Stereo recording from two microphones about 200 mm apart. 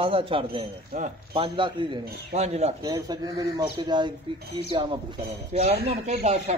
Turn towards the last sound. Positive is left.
turn(degrees=-35)  # may be behind; listen again after turning